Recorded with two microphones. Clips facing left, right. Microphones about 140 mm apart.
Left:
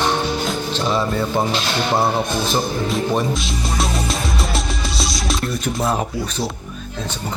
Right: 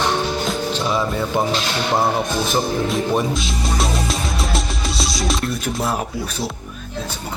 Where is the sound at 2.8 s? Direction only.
Centre (ahead or behind).